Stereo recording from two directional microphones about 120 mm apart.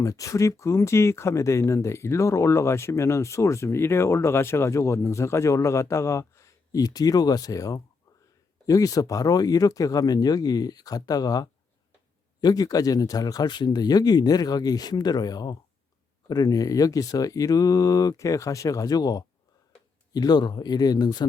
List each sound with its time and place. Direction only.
0.0 s speech: 30° left (ahead or behind)